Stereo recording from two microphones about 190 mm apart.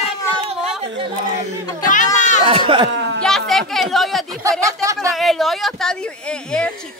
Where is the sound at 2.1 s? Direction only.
40° left (ahead or behind).